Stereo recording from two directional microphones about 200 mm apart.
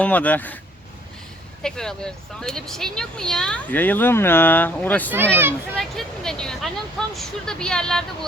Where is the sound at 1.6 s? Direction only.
5° left (ahead or behind).